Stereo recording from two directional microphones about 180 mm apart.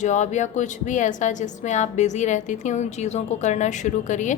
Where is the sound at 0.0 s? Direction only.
40° left (ahead or behind).